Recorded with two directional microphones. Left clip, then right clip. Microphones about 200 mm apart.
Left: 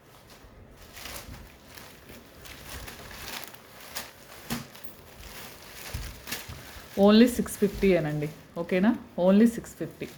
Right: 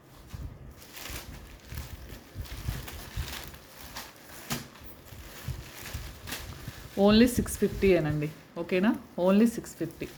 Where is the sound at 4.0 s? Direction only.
55° left (ahead or behind).